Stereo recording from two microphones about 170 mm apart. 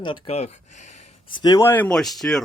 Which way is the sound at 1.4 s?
20° left (ahead or behind).